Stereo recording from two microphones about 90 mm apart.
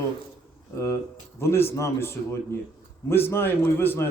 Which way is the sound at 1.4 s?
30° left (ahead or behind).